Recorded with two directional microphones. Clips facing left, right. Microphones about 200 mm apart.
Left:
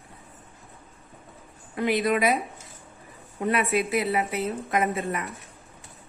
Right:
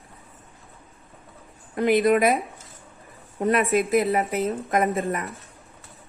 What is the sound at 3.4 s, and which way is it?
A woman's voice, 40° right (ahead or behind).